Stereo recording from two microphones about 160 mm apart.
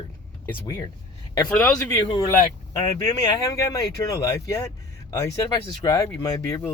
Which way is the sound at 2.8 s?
25° left (ahead or behind).